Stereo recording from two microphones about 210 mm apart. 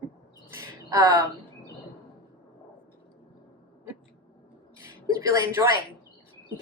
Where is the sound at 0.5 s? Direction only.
15° right (ahead or behind).